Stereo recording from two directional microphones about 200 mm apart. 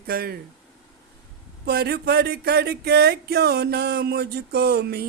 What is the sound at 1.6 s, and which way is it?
Speech, 50° right (ahead or behind).